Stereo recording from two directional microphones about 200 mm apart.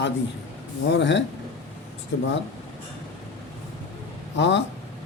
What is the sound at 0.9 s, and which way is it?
Speech, 60° left (ahead or behind).